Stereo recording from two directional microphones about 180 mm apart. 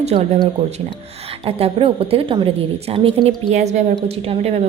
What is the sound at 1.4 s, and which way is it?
A woman's voice, 30° right (ahead or behind).